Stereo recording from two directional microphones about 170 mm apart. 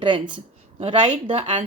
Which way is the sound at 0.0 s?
30° right (ahead or behind).